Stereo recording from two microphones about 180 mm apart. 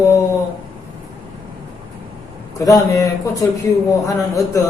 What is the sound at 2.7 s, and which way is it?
Speech, 20° left (ahead or behind).